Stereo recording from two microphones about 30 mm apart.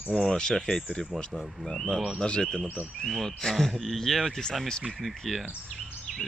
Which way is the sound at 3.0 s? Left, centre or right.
Centre.